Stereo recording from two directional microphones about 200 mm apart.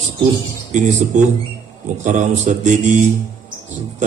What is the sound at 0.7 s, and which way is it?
A man's voice, 35° right (ahead or behind).